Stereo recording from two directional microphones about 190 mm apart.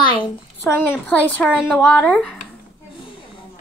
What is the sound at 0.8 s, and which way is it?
Speech, 10° left (ahead or behind).